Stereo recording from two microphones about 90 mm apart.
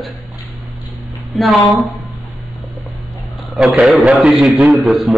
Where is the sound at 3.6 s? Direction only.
10° right (ahead or behind).